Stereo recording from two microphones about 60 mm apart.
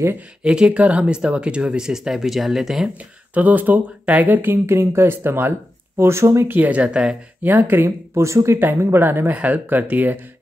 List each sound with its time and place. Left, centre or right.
0.4 s speech: centre
3.3 s speech: right
4.6 s speech: right
6.5 s speech: right
7.4 s speech: right
8.7 s a woman's voice: right